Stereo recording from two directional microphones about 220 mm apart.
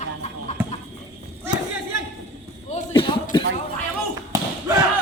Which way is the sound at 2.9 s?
20° left (ahead or behind).